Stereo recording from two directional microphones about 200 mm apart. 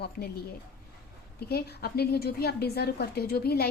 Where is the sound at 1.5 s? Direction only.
50° left (ahead or behind).